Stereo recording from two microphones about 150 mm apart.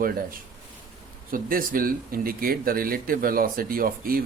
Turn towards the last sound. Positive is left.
turn(degrees=-75)  # may be behind; listen again after turning